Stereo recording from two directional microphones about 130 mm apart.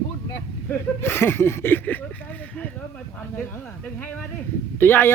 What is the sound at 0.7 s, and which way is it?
Speech, 20° left (ahead or behind).